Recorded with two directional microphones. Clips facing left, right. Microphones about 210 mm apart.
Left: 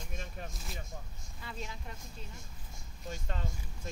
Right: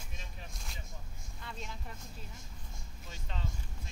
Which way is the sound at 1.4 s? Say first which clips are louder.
Left 2 dB; centre (ahead or behind).